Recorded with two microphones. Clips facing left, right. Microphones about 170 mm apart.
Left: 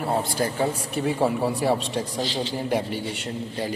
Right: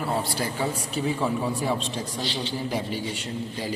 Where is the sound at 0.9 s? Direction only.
65° left (ahead or behind).